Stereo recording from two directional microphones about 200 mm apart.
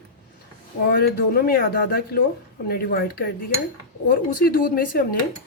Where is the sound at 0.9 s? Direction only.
50° left (ahead or behind).